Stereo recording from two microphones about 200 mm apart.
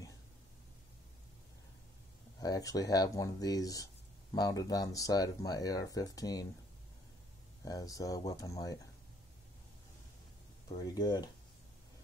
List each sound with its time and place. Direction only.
2.4 s speech: 20° left (ahead or behind)
7.6 s speech: 15° left (ahead or behind)
10.8 s speech: 20° left (ahead or behind)